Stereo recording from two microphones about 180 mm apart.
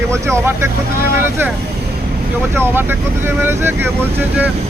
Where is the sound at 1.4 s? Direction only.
10° right (ahead or behind).